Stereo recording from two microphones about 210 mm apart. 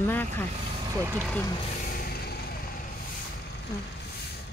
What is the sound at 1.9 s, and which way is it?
Music, 45° left (ahead or behind).